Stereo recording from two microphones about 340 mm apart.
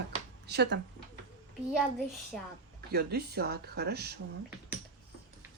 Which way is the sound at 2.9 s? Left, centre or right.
Right.